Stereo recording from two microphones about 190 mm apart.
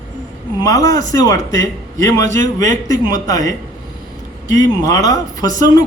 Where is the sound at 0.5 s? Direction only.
20° left (ahead or behind).